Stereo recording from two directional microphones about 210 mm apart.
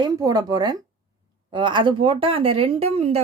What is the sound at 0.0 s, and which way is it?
Speech, 20° right (ahead or behind).